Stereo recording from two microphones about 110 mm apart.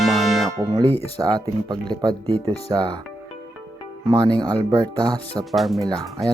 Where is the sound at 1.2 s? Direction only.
35° right (ahead or behind).